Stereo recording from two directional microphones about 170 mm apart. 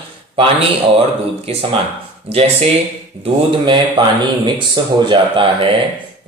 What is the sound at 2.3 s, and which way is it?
Speech, 35° right (ahead or behind).